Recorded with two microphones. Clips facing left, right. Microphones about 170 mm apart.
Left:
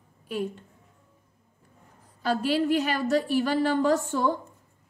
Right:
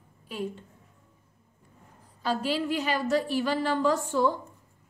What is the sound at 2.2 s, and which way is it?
A woman's voice, 60° left (ahead or behind).